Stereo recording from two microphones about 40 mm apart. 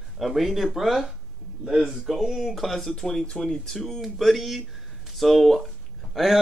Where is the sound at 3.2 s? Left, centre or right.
Left.